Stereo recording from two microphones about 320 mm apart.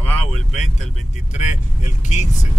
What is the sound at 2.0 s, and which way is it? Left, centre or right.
Speech, left.